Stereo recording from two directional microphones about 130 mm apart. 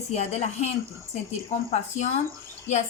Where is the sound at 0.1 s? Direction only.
55° left (ahead or behind).